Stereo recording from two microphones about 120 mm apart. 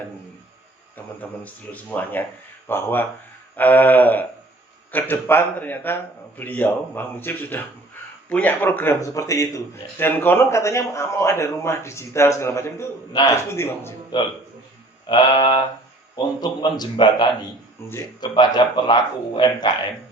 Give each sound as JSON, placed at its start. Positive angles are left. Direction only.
{"t": 1.7, "sound": "a man's voice", "side_deg": 15}
{"t": 14.1, "sound": "a man's voice", "side_deg": 35}